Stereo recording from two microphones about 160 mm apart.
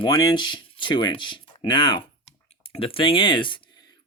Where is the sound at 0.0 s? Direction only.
25° left (ahead or behind).